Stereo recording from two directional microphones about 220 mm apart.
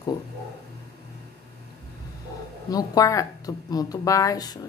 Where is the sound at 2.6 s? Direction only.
15° left (ahead or behind).